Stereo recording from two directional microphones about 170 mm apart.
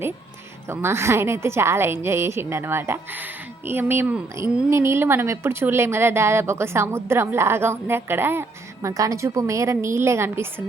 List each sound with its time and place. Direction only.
0.7 s a woman's voice: 15° right (ahead or behind)